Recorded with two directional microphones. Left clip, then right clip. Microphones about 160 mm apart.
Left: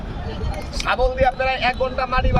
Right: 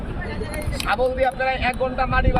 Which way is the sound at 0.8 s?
20° left (ahead or behind).